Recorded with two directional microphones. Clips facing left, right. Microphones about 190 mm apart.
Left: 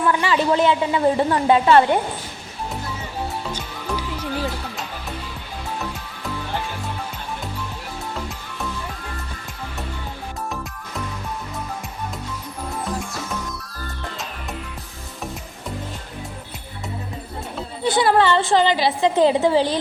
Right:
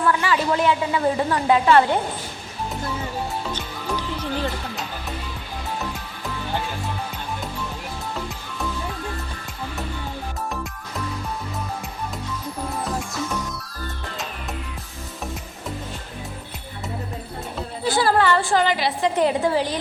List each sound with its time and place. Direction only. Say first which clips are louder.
0.1 s a woman's voice: left 3 dB; 25° left (ahead or behind)
3.8 s music: even; 10° left (ahead or behind)
17.8 s a woman's voice: left 2 dB; 20° left (ahead or behind)